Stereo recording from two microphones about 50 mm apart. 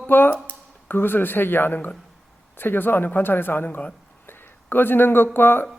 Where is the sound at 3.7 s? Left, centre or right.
Left.